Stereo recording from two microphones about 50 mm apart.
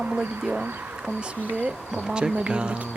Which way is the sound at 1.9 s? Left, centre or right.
Centre.